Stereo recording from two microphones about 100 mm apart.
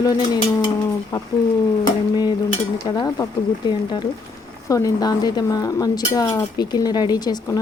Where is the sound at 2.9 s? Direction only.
40° left (ahead or behind).